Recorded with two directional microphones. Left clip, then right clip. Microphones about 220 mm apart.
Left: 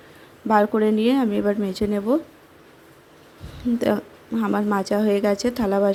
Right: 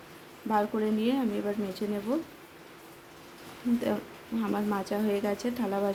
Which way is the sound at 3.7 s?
30° left (ahead or behind).